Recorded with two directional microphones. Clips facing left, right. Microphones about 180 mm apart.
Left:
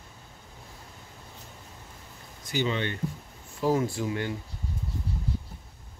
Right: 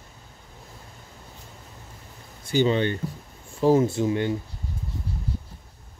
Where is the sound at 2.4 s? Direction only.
30° right (ahead or behind).